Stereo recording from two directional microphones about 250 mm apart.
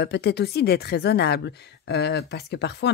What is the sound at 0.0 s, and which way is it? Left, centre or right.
Speech, left.